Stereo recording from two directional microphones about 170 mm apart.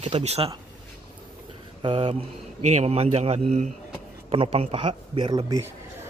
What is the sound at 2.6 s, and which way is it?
Speech, 40° right (ahead or behind).